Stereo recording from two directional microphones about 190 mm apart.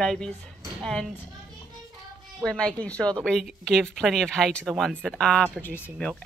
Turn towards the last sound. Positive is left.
turn(degrees=5)  # may be behind; listen again after turning